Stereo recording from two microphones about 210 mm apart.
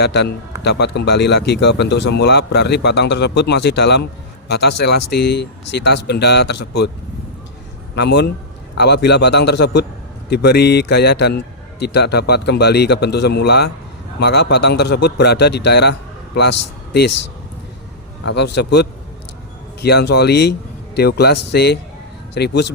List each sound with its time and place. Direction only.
0.0 s speech: 50° left (ahead or behind)
7.9 s speech: 55° left (ahead or behind)
18.3 s speech: 55° left (ahead or behind)